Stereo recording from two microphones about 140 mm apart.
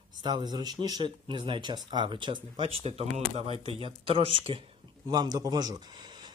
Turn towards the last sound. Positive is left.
turn(degrees=-30)  # may be behind; listen again after turning